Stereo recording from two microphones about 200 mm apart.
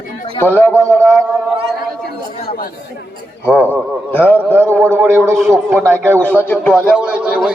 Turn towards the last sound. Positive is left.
turn(degrees=-5)  # may be behind; listen again after turning